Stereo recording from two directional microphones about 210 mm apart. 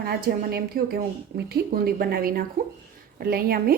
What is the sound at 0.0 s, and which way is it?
A woman's voice, 45° right (ahead or behind).